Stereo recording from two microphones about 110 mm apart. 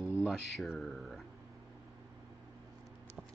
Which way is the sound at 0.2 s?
5° right (ahead or behind).